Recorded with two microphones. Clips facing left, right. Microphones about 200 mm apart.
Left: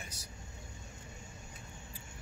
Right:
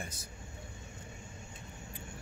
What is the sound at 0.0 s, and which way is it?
Speech, 50° right (ahead or behind).